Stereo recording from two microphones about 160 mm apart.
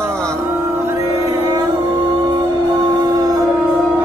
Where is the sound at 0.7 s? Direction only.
15° right (ahead or behind).